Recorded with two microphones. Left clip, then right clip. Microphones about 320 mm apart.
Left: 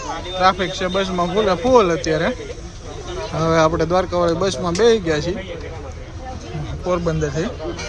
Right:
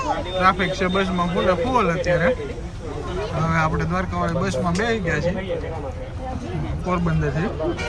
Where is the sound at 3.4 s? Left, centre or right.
Centre.